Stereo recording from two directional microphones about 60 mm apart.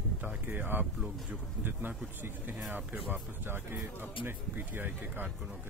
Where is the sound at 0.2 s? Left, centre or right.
Right.